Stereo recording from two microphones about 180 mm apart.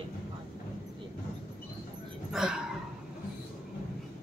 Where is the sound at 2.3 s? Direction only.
Centre (ahead or behind).